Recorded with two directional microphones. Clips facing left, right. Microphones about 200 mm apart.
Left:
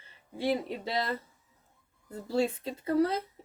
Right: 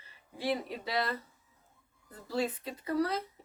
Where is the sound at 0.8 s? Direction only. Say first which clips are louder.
Left 1 dB; 25° left (ahead or behind).